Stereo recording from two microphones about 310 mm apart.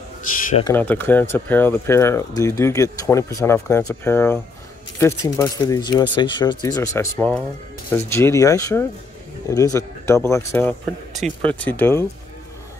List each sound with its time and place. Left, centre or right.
0.4 s speech: left
0.7 s speech: centre